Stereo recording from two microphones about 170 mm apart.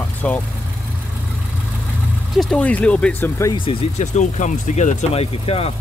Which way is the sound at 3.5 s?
35° left (ahead or behind).